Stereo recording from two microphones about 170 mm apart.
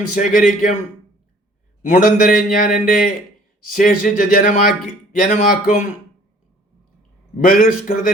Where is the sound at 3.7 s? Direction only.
50° left (ahead or behind).